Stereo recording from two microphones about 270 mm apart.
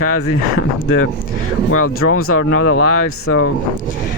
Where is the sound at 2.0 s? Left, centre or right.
Left.